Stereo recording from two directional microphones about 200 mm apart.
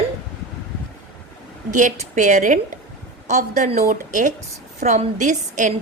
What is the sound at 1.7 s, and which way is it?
A woman's voice, 40° right (ahead or behind).